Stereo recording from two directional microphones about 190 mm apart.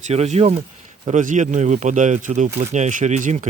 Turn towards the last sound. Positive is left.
turn(degrees=-40)  # may be behind; listen again after turning